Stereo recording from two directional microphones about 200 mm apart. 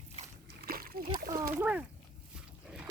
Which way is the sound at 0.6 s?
50° right (ahead or behind).